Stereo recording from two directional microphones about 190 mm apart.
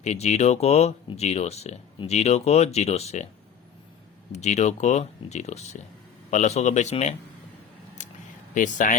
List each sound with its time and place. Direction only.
0.0 s speech: 35° left (ahead or behind)
4.3 s speech: 35° left (ahead or behind)
8.0 s a sound: 40° left (ahead or behind)
8.5 s speech: 45° left (ahead or behind)